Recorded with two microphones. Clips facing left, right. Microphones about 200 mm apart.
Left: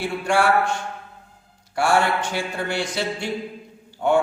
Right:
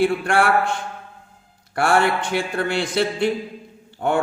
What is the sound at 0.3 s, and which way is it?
Speech, 55° right (ahead or behind).